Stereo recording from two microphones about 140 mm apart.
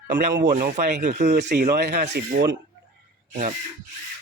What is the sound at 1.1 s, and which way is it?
Speech, 55° right (ahead or behind).